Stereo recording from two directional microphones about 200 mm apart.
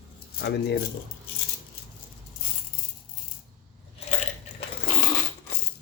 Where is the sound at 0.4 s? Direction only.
55° left (ahead or behind).